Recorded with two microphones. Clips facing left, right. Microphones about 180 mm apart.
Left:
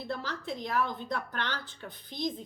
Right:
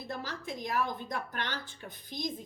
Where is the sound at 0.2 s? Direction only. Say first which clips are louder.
Left 2 dB; 15° right (ahead or behind).